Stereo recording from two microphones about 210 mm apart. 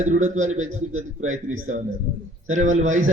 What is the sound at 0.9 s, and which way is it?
Speech, 75° right (ahead or behind).